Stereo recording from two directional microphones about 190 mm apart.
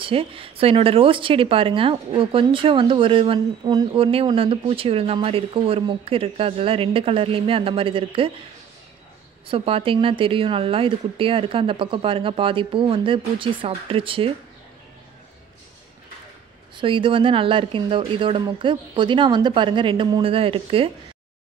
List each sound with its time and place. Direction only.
0.0 s speech: 30° right (ahead or behind)
9.5 s speech: 30° right (ahead or behind)
16.7 s speech: 25° right (ahead or behind)